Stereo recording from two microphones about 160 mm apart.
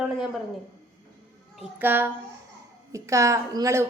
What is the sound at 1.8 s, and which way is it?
A woman's voice, 10° right (ahead or behind).